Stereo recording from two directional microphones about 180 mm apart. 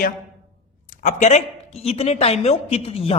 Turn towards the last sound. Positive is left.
turn(degrees=30)  # may be behind; listen again after turning